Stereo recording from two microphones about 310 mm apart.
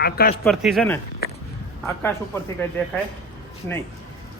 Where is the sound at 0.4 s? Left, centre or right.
Centre.